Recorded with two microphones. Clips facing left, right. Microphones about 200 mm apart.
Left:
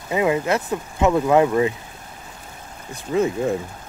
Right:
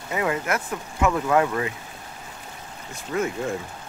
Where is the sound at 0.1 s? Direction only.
20° left (ahead or behind).